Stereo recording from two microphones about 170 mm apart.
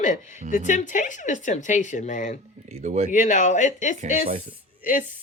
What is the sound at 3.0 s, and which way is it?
Speech, 45° left (ahead or behind).